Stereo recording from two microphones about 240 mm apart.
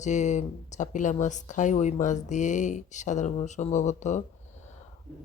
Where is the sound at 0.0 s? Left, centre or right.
Left.